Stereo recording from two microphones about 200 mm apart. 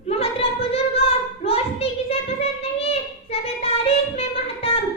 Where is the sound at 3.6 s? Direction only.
30° left (ahead or behind).